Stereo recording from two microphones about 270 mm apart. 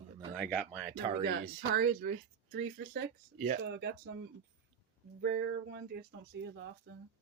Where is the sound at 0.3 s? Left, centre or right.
Centre.